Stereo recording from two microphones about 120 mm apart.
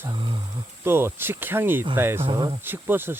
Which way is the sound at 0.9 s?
20° right (ahead or behind).